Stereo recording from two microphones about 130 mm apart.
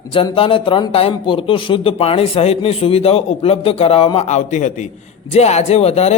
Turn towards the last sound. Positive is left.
turn(degrees=50)  # may be behind; listen again after turning